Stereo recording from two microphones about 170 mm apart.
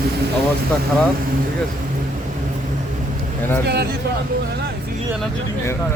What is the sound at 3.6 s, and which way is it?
Speech, 70° right (ahead or behind).